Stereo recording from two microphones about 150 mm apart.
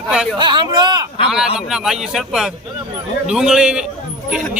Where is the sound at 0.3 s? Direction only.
30° right (ahead or behind).